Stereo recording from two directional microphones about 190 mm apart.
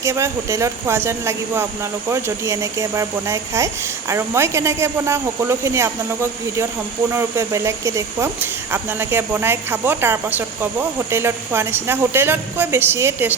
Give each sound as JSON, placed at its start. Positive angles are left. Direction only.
{"t": 0.0, "sound": "speech", "side_deg": -15}
{"t": 7.1, "sound": "speech", "side_deg": -15}